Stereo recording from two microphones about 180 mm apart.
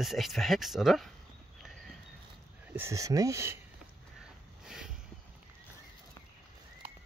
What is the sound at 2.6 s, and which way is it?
Speech, 15° right (ahead or behind).